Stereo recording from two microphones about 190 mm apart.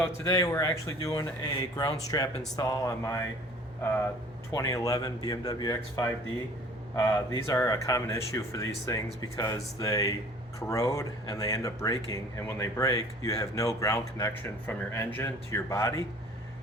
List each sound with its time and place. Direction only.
0.0 s a man's voice: 15° left (ahead or behind)
4.5 s a man's voice: 20° left (ahead or behind)